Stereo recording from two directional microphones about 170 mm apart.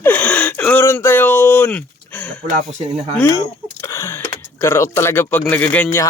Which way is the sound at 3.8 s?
15° left (ahead or behind).